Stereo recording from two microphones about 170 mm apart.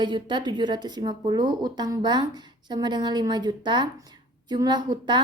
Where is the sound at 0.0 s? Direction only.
25° right (ahead or behind).